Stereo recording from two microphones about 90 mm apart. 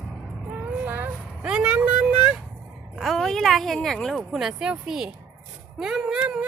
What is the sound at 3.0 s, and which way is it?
Speech, centre (ahead or behind).